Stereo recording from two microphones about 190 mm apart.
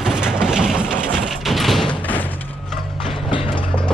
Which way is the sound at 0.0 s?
5° right (ahead or behind).